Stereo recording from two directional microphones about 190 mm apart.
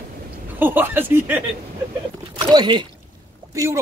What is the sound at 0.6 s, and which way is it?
Speech, 10° right (ahead or behind).